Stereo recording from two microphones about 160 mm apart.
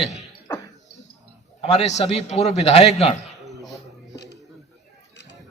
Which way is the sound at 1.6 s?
45° left (ahead or behind).